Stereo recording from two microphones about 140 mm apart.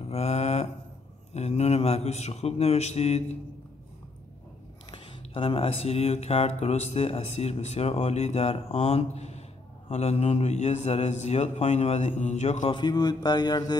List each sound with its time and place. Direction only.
0.0 s a sound: 50° left (ahead or behind)
1.3 s speech: 50° left (ahead or behind)
4.9 s speech: 40° left (ahead or behind)
12.7 s mantra: 30° left (ahead or behind)